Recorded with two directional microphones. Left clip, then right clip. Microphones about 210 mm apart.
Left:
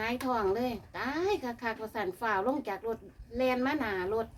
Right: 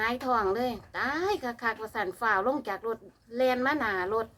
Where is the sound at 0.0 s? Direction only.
15° right (ahead or behind).